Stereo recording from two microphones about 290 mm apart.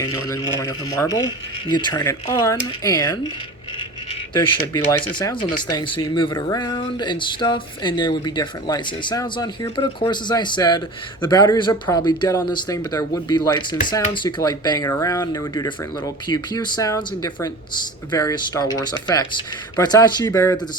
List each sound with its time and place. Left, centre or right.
0.0 s speech: centre
4.4 s speech: centre